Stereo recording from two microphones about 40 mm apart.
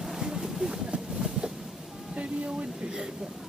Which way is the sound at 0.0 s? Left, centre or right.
Centre.